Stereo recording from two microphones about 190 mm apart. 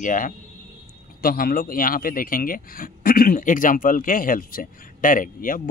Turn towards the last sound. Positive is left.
turn(degrees=45)  # may be behind; listen again after turning